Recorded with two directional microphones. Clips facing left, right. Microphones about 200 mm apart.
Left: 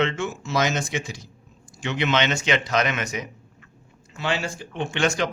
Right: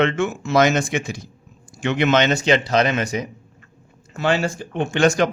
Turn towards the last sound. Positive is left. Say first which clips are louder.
# right 6 dB
turn(degrees=-45)  # may be behind; listen again after turning